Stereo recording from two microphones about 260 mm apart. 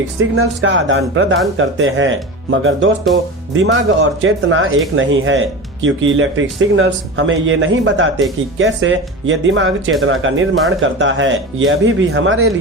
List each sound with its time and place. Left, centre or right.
0.2 s speech: right